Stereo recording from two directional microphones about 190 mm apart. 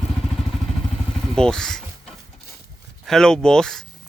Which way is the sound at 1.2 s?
5° left (ahead or behind).